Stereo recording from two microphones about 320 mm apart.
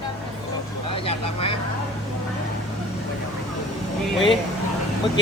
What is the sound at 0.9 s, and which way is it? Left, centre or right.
Vehicle, centre.